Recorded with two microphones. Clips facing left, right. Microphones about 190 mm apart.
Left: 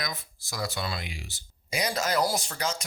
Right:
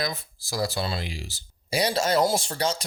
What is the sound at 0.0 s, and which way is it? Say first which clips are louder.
Speech: right 6 dB; 35° right (ahead or behind).